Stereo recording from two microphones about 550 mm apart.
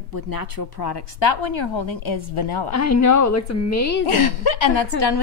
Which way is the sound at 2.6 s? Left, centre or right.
Left.